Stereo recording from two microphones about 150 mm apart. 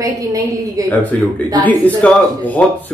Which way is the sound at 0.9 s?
10° left (ahead or behind).